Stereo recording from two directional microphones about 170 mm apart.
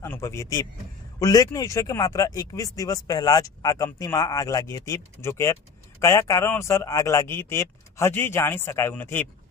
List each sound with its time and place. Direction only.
0.0 s speech: 15° left (ahead or behind)